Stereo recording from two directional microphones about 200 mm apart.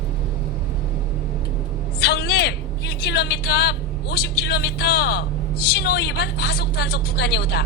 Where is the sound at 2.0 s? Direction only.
55° left (ahead or behind).